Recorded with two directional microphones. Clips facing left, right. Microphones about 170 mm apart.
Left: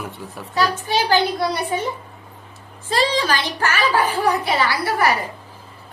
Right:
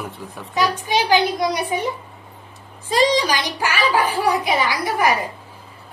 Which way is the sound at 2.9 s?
15° right (ahead or behind).